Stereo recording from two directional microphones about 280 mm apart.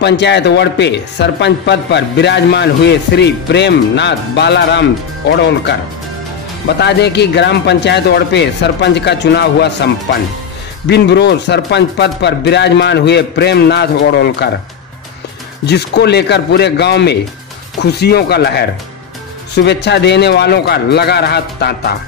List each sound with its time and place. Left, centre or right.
0.0 s speech: left
6.8 s speech: left
10.9 s speech: left
15.6 s speech: left